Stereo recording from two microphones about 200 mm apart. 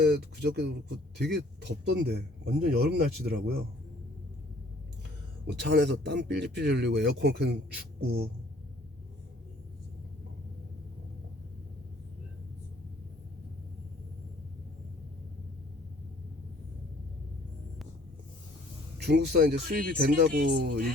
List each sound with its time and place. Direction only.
0.0 s speech: 55° right (ahead or behind)
5.5 s a man's voice: 55° right (ahead or behind)
18.9 s a man's voice: 55° right (ahead or behind)